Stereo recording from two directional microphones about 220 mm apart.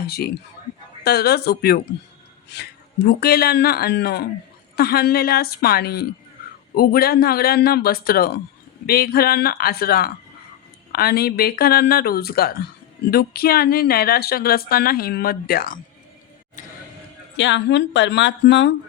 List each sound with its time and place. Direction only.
0.0 s speech: 45° left (ahead or behind)
16.6 s a sound: 35° left (ahead or behind)
17.3 s speech: 55° left (ahead or behind)